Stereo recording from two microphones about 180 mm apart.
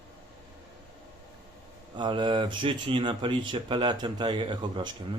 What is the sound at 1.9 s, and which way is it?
Speech, 25° right (ahead or behind).